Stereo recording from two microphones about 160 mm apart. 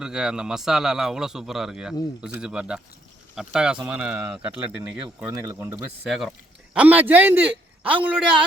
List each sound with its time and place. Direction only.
0.0 s a man's voice: 5° right (ahead or behind)
5.0 s speech: 20° right (ahead or behind)
6.0 s a man's voice: centre (ahead or behind)